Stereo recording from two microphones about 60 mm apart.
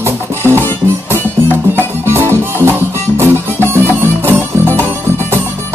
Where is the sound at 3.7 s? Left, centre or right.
Right.